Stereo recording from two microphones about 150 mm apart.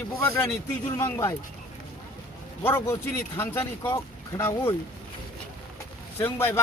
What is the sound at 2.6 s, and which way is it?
Speech, 15° left (ahead or behind).